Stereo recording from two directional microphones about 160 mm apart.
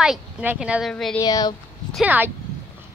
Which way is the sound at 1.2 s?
25° left (ahead or behind).